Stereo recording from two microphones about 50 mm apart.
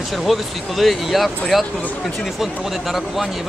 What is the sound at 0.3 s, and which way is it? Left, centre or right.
Speech, centre.